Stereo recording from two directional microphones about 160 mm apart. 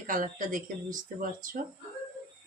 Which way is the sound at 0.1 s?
55° right (ahead or behind).